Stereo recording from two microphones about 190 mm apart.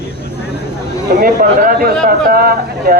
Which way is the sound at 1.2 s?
50° right (ahead or behind).